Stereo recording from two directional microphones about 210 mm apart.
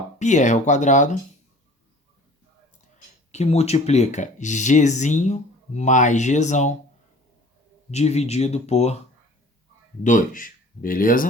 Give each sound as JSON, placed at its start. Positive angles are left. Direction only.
{"t": 0.2, "sound": "speech", "side_deg": 35}
{"t": 3.3, "sound": "speech", "side_deg": 30}
{"t": 7.9, "sound": "speech", "side_deg": 30}
{"t": 10.0, "sound": "speech", "side_deg": 35}